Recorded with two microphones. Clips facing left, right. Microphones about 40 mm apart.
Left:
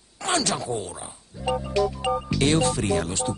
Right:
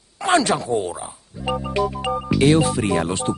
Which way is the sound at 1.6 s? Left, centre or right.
Right.